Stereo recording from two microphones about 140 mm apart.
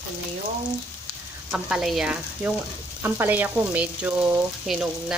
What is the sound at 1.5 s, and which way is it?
Speech, 5° right (ahead or behind).